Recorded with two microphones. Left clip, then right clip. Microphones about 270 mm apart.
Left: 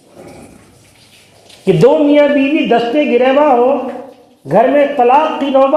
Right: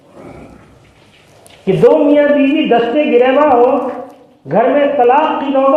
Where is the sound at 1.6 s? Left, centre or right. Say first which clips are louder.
Even; left.